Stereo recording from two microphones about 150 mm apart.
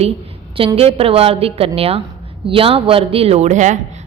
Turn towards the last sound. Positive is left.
turn(degrees=-55)  # may be behind; listen again after turning